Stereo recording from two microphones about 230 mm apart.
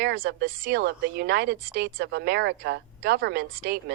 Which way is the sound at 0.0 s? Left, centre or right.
Right.